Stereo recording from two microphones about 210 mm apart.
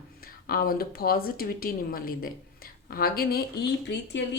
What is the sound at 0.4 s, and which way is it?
Speech, 45° left (ahead or behind).